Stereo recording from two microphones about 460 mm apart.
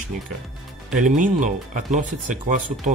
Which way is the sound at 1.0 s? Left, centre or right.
Centre.